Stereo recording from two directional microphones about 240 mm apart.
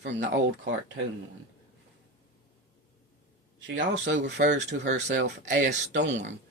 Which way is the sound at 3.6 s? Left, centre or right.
Right.